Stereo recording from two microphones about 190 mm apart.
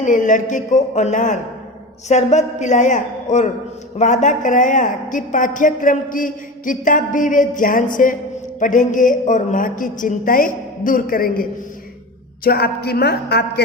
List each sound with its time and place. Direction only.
0.0 s a woman's voice: 40° left (ahead or behind)
12.5 s a woman's voice: 55° left (ahead or behind)